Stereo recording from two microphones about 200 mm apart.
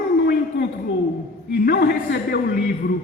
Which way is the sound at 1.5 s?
55° left (ahead or behind).